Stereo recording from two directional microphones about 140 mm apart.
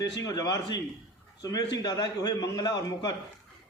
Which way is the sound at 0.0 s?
25° left (ahead or behind).